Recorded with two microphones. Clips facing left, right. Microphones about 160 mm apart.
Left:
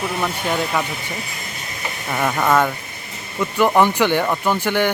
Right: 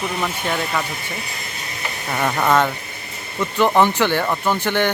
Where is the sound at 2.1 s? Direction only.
Centre (ahead or behind).